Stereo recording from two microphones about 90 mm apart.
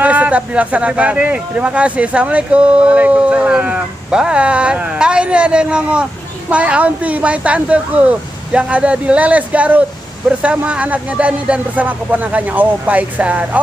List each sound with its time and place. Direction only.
0.0 s speech: 15° right (ahead or behind)